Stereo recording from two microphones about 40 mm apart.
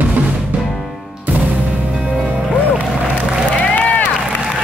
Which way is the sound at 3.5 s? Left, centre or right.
Left.